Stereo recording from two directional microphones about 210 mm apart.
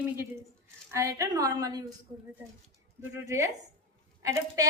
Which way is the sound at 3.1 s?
15° right (ahead or behind).